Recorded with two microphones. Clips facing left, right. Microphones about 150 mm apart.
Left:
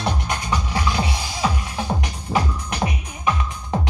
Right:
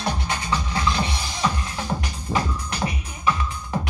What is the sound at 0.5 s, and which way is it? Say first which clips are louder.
Music: left 1 dB; 15° left (ahead or behind).